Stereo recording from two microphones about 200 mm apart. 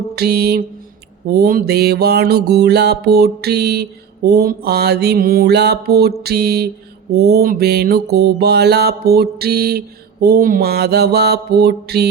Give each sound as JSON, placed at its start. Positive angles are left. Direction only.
{"t": 0.2, "sound": "music", "side_deg": -50}